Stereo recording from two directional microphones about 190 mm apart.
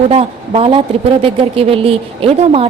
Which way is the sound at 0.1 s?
30° right (ahead or behind).